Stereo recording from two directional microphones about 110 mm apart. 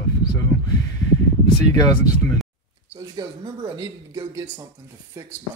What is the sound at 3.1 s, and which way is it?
Speech, 40° right (ahead or behind).